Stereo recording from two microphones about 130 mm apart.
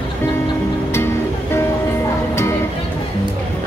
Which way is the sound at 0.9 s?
20° left (ahead or behind).